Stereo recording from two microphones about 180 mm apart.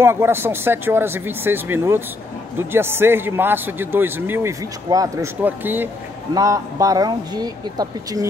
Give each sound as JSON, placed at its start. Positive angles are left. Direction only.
{"t": 0.0, "sound": "a man's voice", "side_deg": -15}